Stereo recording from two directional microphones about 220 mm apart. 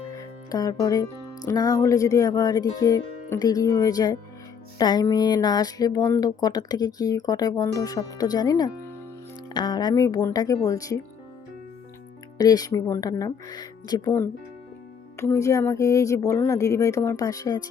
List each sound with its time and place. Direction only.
0.2 s speech: 15° left (ahead or behind)
12.4 s speech: 15° left (ahead or behind)
15.1 s speech: 15° left (ahead or behind)